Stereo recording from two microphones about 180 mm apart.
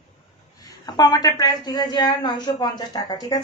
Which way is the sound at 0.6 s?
20° left (ahead or behind).